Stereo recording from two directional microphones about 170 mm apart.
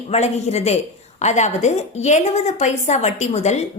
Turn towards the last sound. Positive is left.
turn(degrees=40)  # may be behind; listen again after turning